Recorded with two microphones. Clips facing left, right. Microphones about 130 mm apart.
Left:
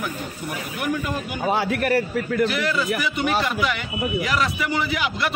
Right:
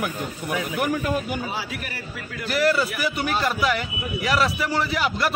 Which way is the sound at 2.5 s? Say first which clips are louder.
Right 2 dB; 40° right (ahead or behind).